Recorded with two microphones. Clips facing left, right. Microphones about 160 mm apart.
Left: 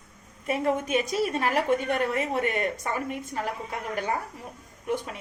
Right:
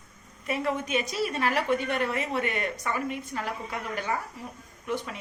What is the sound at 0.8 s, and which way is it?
A woman's voice, 50° left (ahead or behind).